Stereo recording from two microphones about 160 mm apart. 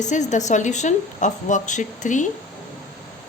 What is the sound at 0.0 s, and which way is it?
A woman's voice, 50° left (ahead or behind).